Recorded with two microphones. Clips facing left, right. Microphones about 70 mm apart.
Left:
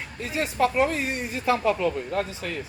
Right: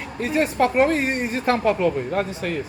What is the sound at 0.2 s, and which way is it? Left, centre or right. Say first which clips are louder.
Speech: right 4 dB; right.